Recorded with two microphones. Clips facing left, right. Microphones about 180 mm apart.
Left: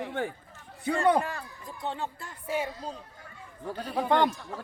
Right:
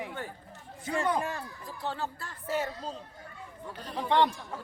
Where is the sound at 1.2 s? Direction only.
20° right (ahead or behind).